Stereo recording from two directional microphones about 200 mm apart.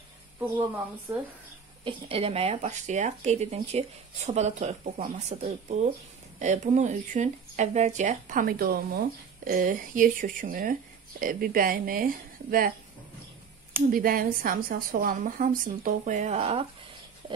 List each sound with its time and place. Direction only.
1.9 s speech: 30° right (ahead or behind); by 12.7 s 45° right (ahead or behind)
13.9 s speech: 45° right (ahead or behind); by 16.6 s 30° right (ahead or behind)